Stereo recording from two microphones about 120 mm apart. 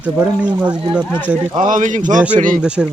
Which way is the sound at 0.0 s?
10° right (ahead or behind).